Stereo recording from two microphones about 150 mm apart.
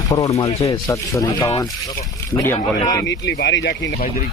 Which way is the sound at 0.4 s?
40° left (ahead or behind).